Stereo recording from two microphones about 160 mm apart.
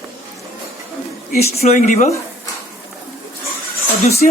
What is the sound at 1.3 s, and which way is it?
Speech, 40° left (ahead or behind).